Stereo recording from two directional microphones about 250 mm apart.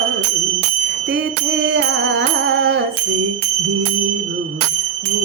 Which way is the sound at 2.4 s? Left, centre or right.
Right.